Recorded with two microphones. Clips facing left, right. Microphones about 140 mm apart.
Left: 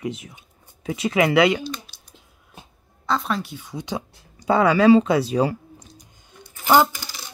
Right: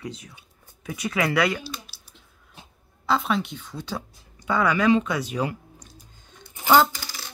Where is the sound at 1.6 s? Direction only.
5° right (ahead or behind).